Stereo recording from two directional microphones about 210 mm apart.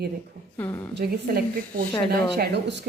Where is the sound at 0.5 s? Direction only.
10° left (ahead or behind).